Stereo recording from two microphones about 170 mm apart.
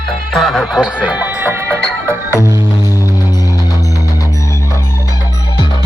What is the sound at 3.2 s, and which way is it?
Music, 20° left (ahead or behind).